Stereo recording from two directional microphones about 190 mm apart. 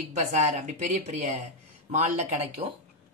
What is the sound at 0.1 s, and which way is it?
Speech, 40° right (ahead or behind).